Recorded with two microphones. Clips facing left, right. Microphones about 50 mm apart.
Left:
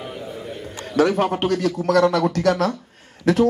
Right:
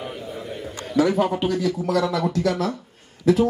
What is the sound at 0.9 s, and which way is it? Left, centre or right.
A man's voice, left.